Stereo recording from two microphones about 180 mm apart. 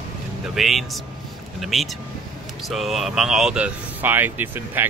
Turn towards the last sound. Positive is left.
turn(degrees=-10)  # may be behind; listen again after turning